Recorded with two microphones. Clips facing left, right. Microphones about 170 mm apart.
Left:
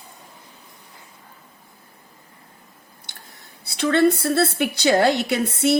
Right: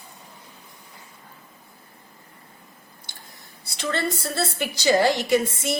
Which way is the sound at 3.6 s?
60° left (ahead or behind).